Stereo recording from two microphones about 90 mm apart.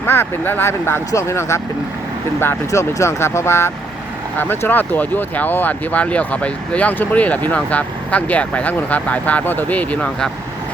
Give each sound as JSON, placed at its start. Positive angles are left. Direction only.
{"t": 0.0, "sound": "speech", "side_deg": 25}